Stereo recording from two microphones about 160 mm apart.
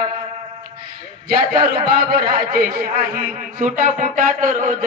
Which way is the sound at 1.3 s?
65° right (ahead or behind).